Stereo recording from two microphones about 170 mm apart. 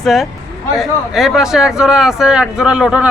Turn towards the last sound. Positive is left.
turn(degrees=-5)  # may be behind; listen again after turning